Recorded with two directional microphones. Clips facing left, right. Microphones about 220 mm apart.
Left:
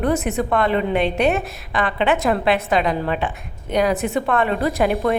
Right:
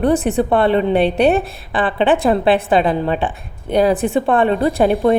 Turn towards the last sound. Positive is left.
turn(degrees=-30)  # may be behind; listen again after turning